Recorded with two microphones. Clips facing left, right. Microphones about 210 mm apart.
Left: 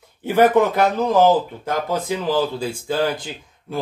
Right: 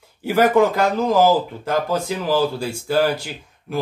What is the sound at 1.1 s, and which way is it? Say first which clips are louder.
Speech: even; 10° right (ahead or behind).